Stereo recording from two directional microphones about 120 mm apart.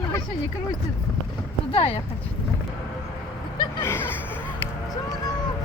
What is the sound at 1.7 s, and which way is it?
Speech, 50° left (ahead or behind).